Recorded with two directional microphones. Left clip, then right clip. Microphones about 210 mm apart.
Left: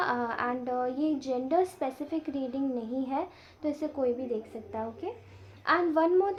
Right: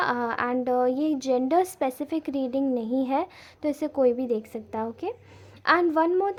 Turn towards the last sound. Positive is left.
turn(degrees=-30)  # may be behind; listen again after turning